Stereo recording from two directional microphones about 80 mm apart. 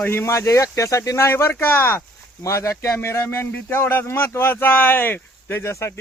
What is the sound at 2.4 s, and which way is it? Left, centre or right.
Speech, left.